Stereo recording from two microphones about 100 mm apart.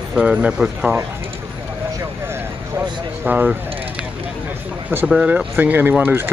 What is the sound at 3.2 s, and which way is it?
Speech, 15° right (ahead or behind).